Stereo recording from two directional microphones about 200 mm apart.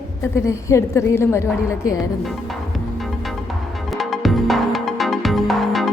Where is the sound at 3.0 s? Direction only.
Centre (ahead or behind).